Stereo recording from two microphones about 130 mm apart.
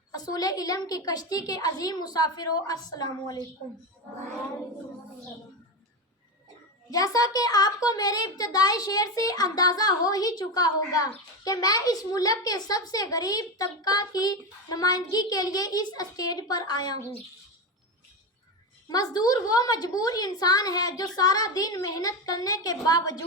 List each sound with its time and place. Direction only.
0.1 s a woman's voice: 30° left (ahead or behind)
6.9 s a woman's voice: 30° left (ahead or behind)
18.9 s a woman's voice: 30° left (ahead or behind)